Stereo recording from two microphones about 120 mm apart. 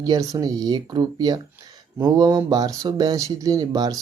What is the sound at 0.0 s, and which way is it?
Speech, 30° right (ahead or behind).